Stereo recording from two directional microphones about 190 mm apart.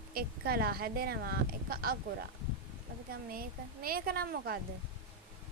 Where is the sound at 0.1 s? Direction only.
50° right (ahead or behind).